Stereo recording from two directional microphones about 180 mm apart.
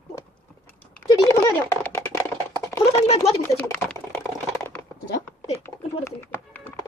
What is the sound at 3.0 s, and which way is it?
Speech, 35° left (ahead or behind).